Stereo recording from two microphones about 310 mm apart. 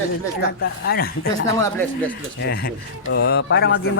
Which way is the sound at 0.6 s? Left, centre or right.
Left.